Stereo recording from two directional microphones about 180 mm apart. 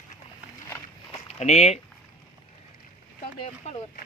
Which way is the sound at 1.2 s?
35° left (ahead or behind).